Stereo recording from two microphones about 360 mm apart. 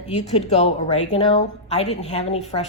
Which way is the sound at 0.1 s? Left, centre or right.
Centre.